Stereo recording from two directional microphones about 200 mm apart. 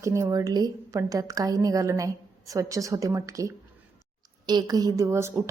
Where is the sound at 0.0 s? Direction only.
15° right (ahead or behind).